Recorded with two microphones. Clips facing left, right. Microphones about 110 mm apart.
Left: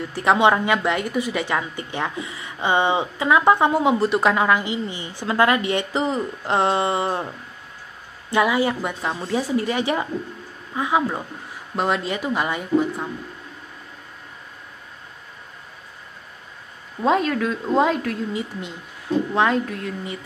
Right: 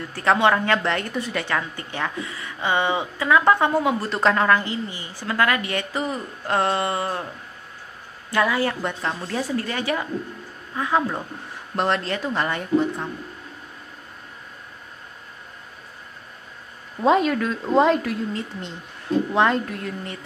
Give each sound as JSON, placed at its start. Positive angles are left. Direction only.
{"t": 0.1, "sound": "a woman's voice", "side_deg": 15}
{"t": 8.3, "sound": "a woman's voice", "side_deg": 15}
{"t": 17.0, "sound": "a woman's voice", "side_deg": 0}